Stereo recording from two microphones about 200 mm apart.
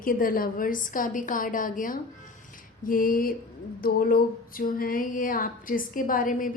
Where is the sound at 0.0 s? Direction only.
45° left (ahead or behind).